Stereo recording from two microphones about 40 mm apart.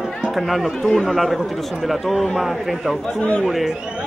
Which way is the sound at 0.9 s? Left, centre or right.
Centre.